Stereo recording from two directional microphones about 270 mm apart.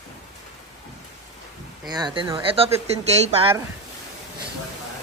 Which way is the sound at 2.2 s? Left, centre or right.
Centre.